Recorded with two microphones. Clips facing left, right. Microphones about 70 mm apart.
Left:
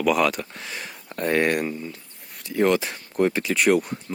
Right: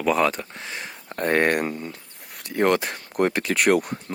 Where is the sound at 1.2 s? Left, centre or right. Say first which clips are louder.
Right 1 dB; right.